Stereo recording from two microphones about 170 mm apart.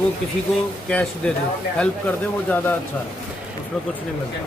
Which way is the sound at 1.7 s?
5° left (ahead or behind).